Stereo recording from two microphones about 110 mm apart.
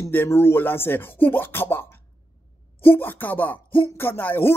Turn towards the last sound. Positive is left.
turn(degrees=20)  # may be behind; listen again after turning